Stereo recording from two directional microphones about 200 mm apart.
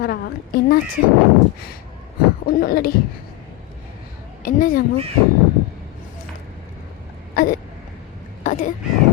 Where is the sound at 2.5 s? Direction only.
50° left (ahead or behind).